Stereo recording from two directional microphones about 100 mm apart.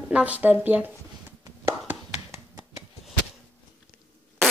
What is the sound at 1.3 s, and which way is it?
Chopping, 25° right (ahead or behind).